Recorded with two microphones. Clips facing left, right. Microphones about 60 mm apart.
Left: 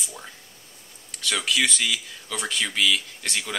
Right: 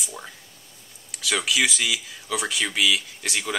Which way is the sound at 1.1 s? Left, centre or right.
Centre.